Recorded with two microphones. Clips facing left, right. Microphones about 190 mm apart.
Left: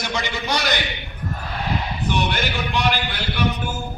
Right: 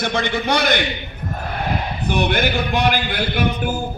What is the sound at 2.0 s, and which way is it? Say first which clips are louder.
A man's voice: right 5 dB; 55° right (ahead or behind).